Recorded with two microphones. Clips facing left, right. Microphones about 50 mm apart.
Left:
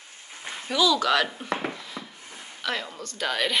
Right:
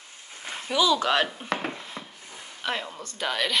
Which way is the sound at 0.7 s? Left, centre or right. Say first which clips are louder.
Even; right.